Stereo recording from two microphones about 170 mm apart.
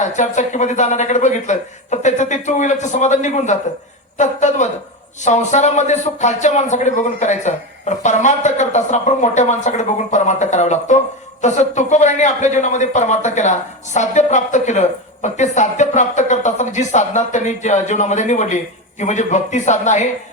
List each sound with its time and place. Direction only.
0.0 s speech: 45° left (ahead or behind)